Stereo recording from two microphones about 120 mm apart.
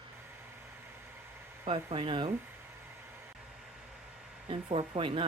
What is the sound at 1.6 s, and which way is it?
Speech, 50° right (ahead or behind).